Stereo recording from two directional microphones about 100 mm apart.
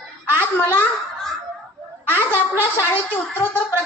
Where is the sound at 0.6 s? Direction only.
20° left (ahead or behind).